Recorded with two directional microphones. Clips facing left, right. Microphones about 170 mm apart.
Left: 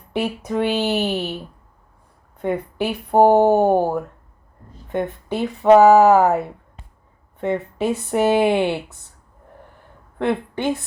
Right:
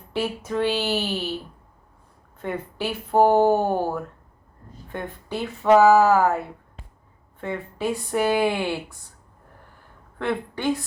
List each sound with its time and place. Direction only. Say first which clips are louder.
0.1 s a sound: left 3 dB; 15° left (ahead or behind)
1.0 s speech: left 4 dB; 20° left (ahead or behind)
2.8 s speech: left 4 dB; 20° left (ahead or behind)
10.2 s a woman's voice: left 5 dB; 20° left (ahead or behind)